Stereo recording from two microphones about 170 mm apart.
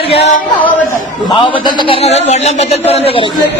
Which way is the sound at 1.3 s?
30° left (ahead or behind).